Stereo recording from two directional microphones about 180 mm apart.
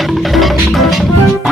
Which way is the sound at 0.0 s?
Centre (ahead or behind).